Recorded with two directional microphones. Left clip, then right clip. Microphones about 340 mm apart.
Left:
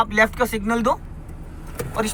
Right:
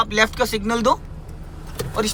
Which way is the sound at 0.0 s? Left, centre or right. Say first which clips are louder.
Even; centre.